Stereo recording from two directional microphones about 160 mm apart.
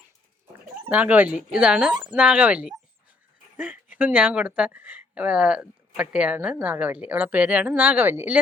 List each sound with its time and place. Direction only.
0.9 s speech: 10° right (ahead or behind)